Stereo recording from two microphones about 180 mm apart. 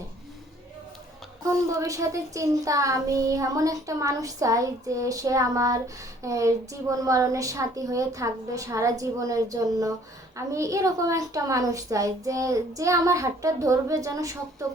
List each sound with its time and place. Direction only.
1.5 s a child's voice: 20° right (ahead or behind)